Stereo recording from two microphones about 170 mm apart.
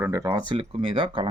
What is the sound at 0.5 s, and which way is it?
Speech, 30° right (ahead or behind).